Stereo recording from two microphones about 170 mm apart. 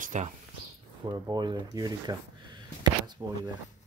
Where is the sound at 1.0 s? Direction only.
25° right (ahead or behind).